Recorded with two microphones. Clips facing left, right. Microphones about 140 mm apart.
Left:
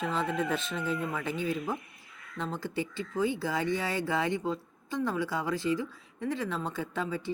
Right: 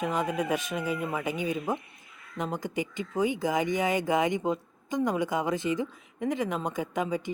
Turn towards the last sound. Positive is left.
turn(degrees=-15)  # may be behind; listen again after turning